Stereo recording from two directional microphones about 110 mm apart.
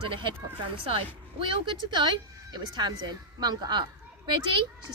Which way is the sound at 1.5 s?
45° right (ahead or behind).